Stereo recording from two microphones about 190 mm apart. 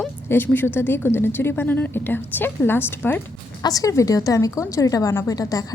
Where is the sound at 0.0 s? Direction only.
10° left (ahead or behind).